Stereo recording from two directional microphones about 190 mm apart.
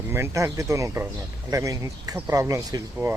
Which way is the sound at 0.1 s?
15° right (ahead or behind).